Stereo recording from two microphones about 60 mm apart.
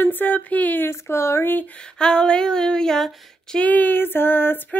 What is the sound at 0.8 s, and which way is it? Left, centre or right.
Speech, left.